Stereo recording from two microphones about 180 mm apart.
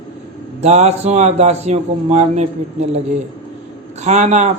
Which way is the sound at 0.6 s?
40° right (ahead or behind).